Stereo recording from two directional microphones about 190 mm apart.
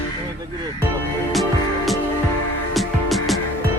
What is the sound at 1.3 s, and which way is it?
Music, centre (ahead or behind).